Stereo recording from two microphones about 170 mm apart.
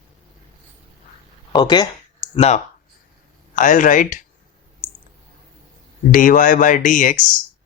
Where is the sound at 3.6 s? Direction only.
50° left (ahead or behind).